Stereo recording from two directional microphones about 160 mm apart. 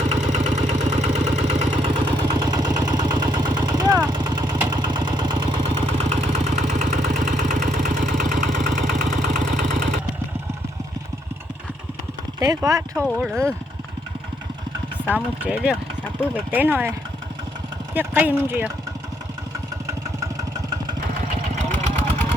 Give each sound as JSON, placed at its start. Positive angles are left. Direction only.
{"t": 0.0, "sound": "engine", "side_deg": -45}
{"t": 1.7, "sound": "vehicle", "side_deg": -30}
{"t": 4.4, "sound": "vehicle", "side_deg": -15}
{"t": 4.7, "sound": "vehicle", "side_deg": -30}
{"t": 6.0, "sound": "vehicle", "side_deg": -45}
{"t": 12.4, "sound": "speech", "side_deg": -20}
{"t": 13.1, "sound": "speech", "side_deg": 0}
{"t": 15.0, "sound": "speech", "side_deg": -10}
{"t": 17.9, "sound": "speech", "side_deg": -10}